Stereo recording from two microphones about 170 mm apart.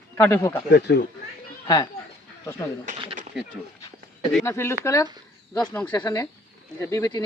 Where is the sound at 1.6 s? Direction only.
20° left (ahead or behind).